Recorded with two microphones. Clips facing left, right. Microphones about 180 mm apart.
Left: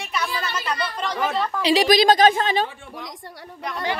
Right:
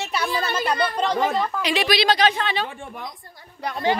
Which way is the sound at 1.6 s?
35° left (ahead or behind).